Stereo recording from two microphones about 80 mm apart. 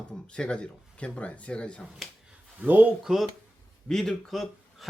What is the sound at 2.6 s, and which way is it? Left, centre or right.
Speech, centre.